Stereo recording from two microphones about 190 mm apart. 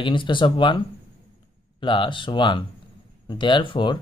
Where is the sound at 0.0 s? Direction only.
25° left (ahead or behind).